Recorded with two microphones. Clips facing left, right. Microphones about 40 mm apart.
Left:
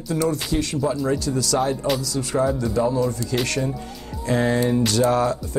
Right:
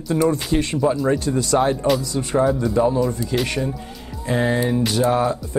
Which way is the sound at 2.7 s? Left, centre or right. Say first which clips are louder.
Right 3 dB; right.